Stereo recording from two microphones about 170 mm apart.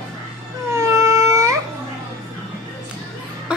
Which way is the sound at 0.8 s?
20° right (ahead or behind).